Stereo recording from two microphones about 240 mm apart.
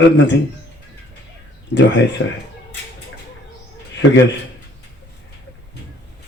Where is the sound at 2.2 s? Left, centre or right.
Left.